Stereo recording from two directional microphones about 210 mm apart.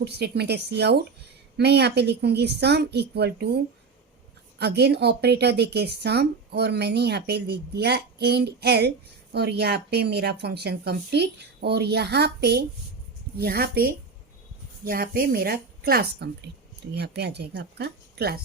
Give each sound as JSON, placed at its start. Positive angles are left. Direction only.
{"t": 0.0, "sound": "speech", "side_deg": -50}